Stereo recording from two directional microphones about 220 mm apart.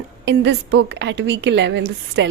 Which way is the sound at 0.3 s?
50° right (ahead or behind).